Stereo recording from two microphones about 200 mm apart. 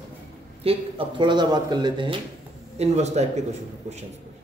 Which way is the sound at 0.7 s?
25° right (ahead or behind).